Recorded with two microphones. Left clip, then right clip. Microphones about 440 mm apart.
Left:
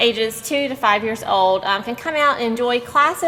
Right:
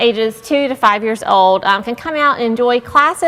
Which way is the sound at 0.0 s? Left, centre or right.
Right.